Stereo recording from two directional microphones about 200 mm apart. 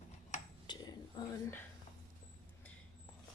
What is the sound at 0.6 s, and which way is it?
Whispering, 20° left (ahead or behind).